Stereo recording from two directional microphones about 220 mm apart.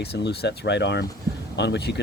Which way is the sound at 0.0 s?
50° left (ahead or behind).